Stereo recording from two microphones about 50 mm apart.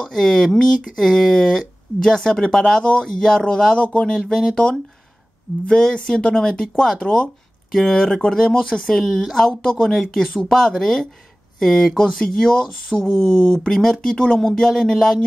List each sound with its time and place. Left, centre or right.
0.1 s speech: centre
7.7 s speech: centre
8.3 s speech: centre
8.9 s speech: centre
9.5 s speech: centre
14.1 s speech: centre
14.4 s speech: centre